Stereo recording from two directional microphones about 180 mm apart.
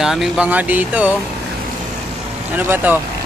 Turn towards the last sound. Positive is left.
turn(degrees=-10)  # may be behind; listen again after turning